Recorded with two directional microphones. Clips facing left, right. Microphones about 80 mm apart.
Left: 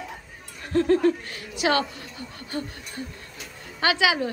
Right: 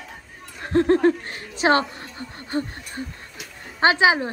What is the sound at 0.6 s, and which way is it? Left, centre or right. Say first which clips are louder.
A woman's voice: right 3 dB; right.